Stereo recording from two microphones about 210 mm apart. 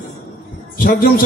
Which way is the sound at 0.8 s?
45° left (ahead or behind).